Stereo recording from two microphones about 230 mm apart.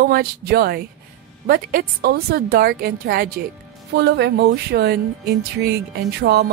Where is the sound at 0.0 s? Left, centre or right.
Right.